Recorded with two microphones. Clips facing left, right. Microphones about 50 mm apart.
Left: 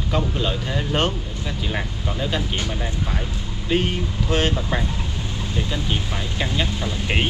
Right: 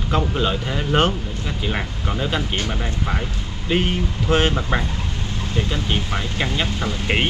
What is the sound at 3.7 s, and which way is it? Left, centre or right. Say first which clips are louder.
Speech: right 1 dB; centre.